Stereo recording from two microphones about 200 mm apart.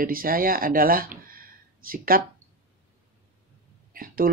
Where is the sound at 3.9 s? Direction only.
45° right (ahead or behind).